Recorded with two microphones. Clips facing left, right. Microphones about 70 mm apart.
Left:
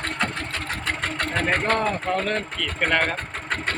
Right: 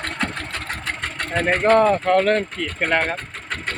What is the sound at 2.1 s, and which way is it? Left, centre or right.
Speech, right.